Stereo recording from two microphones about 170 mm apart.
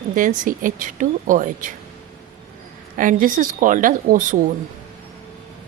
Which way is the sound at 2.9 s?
50° right (ahead or behind).